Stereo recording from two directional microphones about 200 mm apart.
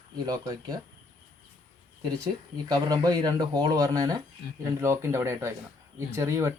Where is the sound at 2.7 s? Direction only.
20° right (ahead or behind).